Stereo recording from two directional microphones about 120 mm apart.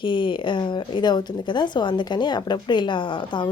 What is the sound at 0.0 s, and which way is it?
Speech, 45° left (ahead or behind).